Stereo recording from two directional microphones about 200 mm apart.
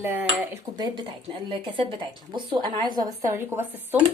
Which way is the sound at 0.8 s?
25° right (ahead or behind).